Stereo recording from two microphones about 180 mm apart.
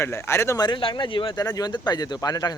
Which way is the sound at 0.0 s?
15° left (ahead or behind).